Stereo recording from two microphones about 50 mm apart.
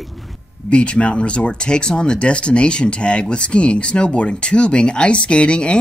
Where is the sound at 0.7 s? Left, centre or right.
Left.